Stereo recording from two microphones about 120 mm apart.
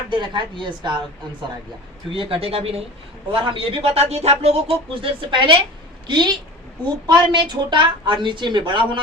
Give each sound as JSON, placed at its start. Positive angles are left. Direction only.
{"t": 0.1, "sound": "a woman's voice", "side_deg": -40}
{"t": 2.0, "sound": "a man's voice", "side_deg": -50}